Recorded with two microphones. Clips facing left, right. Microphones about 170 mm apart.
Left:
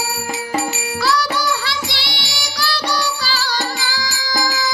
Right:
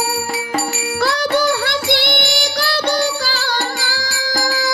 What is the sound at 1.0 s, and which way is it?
Music, 55° right (ahead or behind).